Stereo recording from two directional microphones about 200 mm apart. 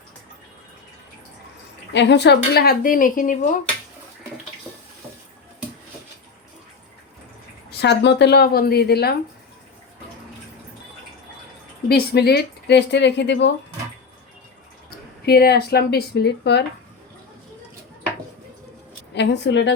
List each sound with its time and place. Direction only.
1.9 s speech: 60° left (ahead or behind); by 3.6 s 40° left (ahead or behind)
7.7 s speech: 60° left (ahead or behind)
11.9 s speech: 55° left (ahead or behind)
14.8 s speech: 50° left (ahead or behind)
19.1 s speech: 60° left (ahead or behind)